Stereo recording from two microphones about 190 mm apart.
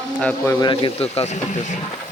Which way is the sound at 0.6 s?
25° left (ahead or behind).